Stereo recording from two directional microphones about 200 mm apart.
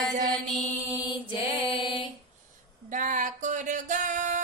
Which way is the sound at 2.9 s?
40° right (ahead or behind).